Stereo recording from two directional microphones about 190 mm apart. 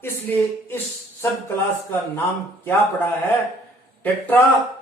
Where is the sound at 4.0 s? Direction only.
10° left (ahead or behind).